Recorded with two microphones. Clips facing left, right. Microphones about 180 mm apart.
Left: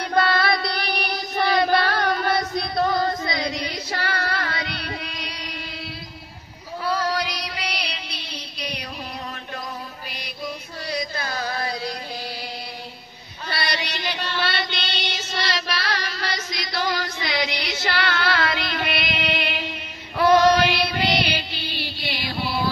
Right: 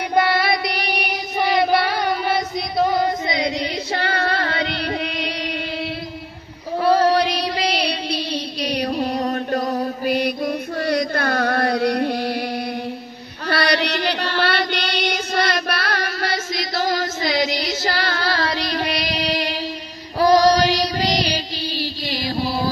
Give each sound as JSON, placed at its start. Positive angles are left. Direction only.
{"t": 0.1, "sound": "a sound", "side_deg": -20}
{"t": 1.7, "sound": "music", "side_deg": -10}
{"t": 6.8, "sound": "child singing", "side_deg": -65}
{"t": 7.2, "sound": "music", "side_deg": -30}
{"t": 8.6, "sound": "music", "side_deg": -65}
{"t": 9.7, "sound": "mantra", "side_deg": -50}
{"t": 13.5, "sound": "child singing", "side_deg": -60}